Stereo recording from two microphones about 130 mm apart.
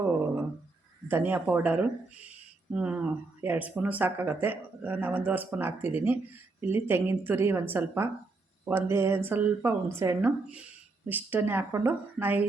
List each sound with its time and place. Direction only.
1.0 s speech: 15° right (ahead or behind)